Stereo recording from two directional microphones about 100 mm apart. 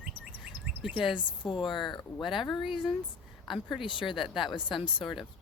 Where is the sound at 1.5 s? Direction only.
55° left (ahead or behind).